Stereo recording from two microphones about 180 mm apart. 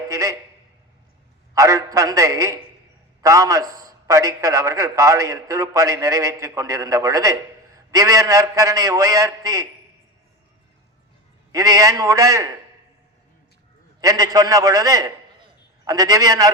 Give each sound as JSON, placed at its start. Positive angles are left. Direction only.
{"t": 0.1, "sound": "a sound", "side_deg": -15}
{"t": 1.5, "sound": "a man's voice", "side_deg": -15}
{"t": 11.5, "sound": "a man's voice", "side_deg": -20}
{"t": 14.0, "sound": "a man's voice", "side_deg": -20}